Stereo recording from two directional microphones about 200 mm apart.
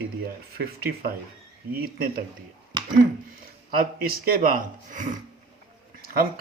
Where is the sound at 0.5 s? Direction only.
50° right (ahead or behind).